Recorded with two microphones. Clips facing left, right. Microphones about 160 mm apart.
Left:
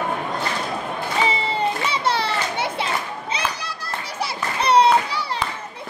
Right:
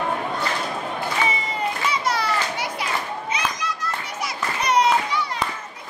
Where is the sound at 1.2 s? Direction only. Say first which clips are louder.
Left 5 dB; 30° left (ahead or behind).